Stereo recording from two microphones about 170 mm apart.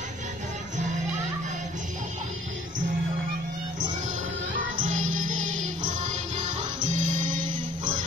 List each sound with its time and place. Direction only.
4.7 s music: 50° right (ahead or behind)